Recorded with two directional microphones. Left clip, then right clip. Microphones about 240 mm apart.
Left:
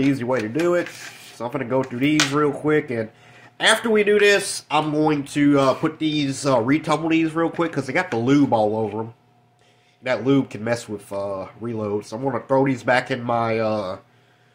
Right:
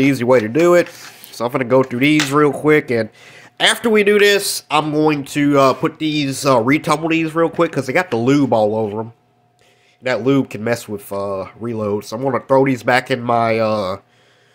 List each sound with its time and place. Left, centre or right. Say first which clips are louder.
0.0 s rub: right 8 dB; right
3.5 s speech: right 3 dB; right
10.0 s speech: right 4 dB; right